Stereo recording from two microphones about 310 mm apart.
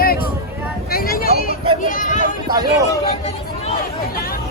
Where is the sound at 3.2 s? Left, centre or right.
Left.